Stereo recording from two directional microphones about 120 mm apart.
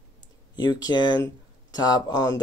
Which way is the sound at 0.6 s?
35° left (ahead or behind).